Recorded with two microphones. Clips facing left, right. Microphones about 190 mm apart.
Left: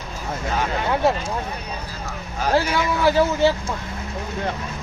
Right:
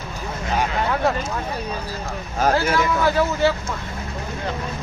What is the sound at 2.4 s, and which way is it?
Speech, 45° right (ahead or behind).